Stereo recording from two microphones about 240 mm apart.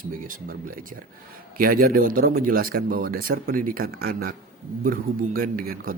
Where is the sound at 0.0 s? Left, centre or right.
Right.